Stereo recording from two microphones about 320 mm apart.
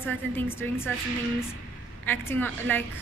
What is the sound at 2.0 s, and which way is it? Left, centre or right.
Speech, centre.